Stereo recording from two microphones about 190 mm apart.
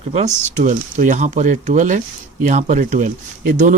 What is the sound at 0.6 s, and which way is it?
Speech, 45° right (ahead or behind).